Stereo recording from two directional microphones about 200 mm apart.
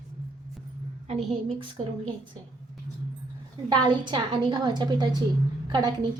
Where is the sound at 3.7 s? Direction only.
20° right (ahead or behind).